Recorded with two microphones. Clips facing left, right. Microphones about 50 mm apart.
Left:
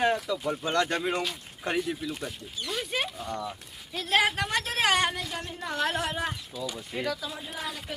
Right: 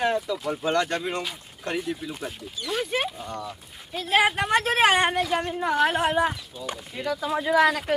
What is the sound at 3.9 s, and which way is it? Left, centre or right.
Speech, centre.